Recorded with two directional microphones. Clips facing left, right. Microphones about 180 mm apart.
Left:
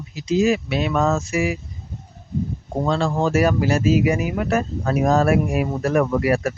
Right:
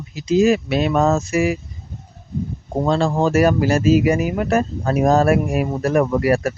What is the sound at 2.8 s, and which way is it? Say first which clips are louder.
Speech: right 3 dB; 35° right (ahead or behind).